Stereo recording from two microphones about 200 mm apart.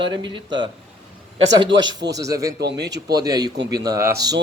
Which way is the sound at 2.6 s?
55° right (ahead or behind).